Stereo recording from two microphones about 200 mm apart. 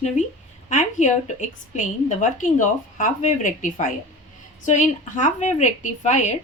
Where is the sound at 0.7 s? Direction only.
40° left (ahead or behind).